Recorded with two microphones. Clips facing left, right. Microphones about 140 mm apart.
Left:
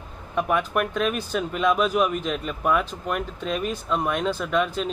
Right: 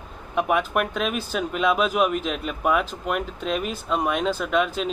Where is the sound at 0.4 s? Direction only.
5° right (ahead or behind).